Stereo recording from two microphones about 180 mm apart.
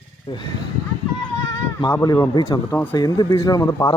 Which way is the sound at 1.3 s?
20° left (ahead or behind).